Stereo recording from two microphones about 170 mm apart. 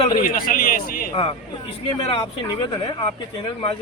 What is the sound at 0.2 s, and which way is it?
Speech, 55° left (ahead or behind).